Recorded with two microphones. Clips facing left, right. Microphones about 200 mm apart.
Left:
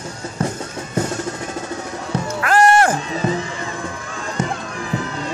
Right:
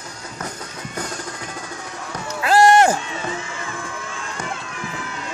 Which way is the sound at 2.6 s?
20° right (ahead or behind).